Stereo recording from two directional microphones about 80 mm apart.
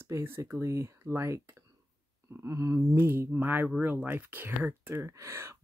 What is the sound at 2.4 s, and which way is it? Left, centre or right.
Speech, right.